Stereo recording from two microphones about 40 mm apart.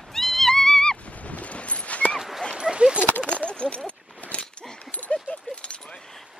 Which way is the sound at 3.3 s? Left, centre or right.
Left.